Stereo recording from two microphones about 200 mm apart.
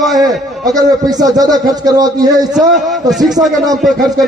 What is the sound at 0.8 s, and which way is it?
A man's voice, 20° right (ahead or behind).